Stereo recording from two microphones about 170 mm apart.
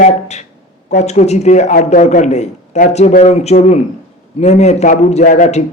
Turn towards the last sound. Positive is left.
turn(degrees=45)  # may be behind; listen again after turning